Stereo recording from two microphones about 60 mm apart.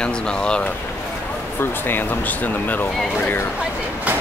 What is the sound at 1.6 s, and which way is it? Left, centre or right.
Speech, left.